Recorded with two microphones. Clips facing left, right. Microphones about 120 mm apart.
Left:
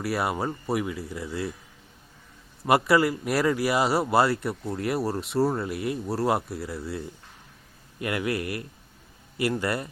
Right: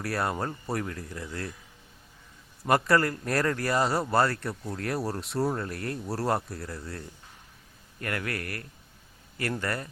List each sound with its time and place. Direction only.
0.0 s speech: 5° left (ahead or behind)
2.6 s speech: 5° left (ahead or behind)
7.9 s speech: 15° left (ahead or behind)